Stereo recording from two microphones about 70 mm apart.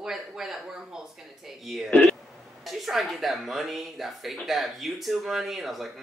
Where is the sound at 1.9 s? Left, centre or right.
Centre.